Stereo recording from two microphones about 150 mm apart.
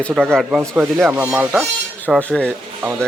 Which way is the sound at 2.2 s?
5° left (ahead or behind).